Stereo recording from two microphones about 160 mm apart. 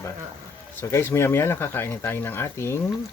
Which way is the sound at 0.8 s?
15° left (ahead or behind).